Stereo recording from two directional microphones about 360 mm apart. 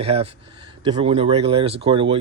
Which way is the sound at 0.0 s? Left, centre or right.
Centre.